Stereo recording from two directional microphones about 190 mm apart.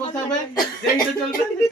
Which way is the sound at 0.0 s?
20° left (ahead or behind).